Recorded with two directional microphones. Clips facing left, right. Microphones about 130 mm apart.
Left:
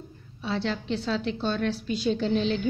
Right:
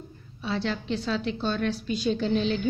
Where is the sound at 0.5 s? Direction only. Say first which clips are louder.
Even; 30° left (ahead or behind).